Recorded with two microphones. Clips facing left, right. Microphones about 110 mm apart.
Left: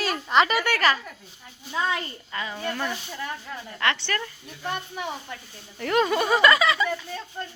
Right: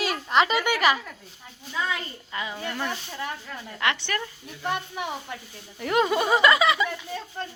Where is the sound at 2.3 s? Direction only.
15° right (ahead or behind).